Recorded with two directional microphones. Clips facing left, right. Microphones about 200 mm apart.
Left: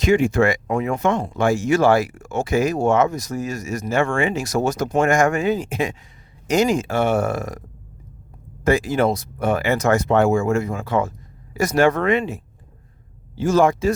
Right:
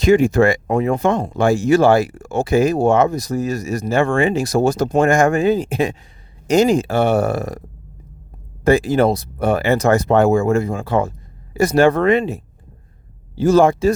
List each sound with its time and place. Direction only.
0.0 s speech: 40° right (ahead or behind)
8.6 s speech: 35° right (ahead or behind)